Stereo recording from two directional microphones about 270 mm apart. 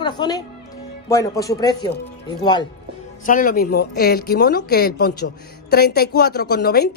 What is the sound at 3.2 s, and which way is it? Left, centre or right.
Speech, left.